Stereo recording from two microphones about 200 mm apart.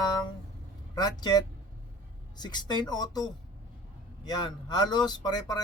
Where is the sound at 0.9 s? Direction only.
20° left (ahead or behind).